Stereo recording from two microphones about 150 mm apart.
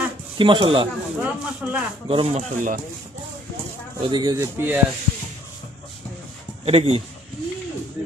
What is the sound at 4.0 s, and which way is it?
Speech, 30° right (ahead or behind).